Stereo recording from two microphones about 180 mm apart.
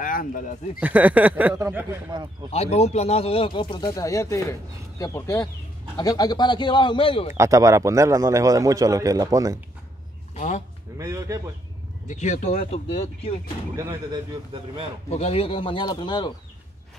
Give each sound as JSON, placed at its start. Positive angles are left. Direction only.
{"t": 0.0, "sound": "speech", "side_deg": 50}
{"t": 0.7, "sound": "a man's voice", "side_deg": -10}
{"t": 2.5, "sound": "speech", "side_deg": 35}
{"t": 7.3, "sound": "a man's voice", "side_deg": -15}
{"t": 10.3, "sound": "a sound", "side_deg": 40}
{"t": 11.0, "sound": "a man's voice", "side_deg": -15}
{"t": 12.1, "sound": "speech", "side_deg": 40}
{"t": 13.7, "sound": "a man's voice", "side_deg": -20}
{"t": 15.0, "sound": "speech", "side_deg": 35}